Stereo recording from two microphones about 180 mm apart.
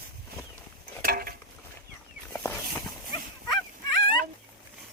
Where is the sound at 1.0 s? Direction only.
55° right (ahead or behind).